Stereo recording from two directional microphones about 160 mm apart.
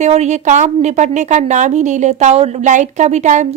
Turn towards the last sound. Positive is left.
turn(degrees=-50)  # may be behind; listen again after turning